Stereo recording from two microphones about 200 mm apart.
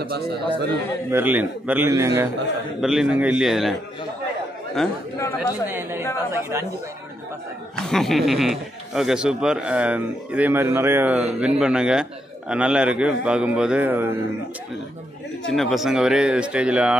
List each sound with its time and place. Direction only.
0.0 s a man's voice: 50° right (ahead or behind)
1.1 s a man's voice: 10° right (ahead or behind)
2.8 s speech: 5° right (ahead or behind)
4.8 s speech: centre (ahead or behind)
5.2 s speech: 15° left (ahead or behind)
5.7 s a man's voice: 10° right (ahead or behind)
7.8 s speech: centre (ahead or behind)
15.4 s speech: centre (ahead or behind)